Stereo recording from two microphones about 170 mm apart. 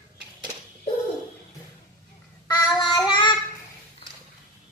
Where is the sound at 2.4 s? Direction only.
25° left (ahead or behind).